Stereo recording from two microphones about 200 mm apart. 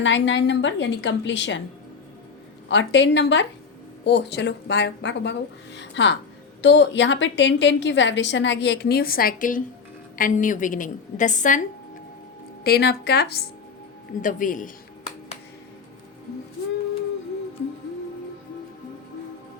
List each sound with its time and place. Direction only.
0.0 s a woman's voice: 65° left (ahead or behind)
2.6 s a woman's voice: 65° left (ahead or behind); by 11.6 s 40° left (ahead or behind)
12.6 s speech: 50° left (ahead or behind)
14.2 s speech: 40° left (ahead or behind)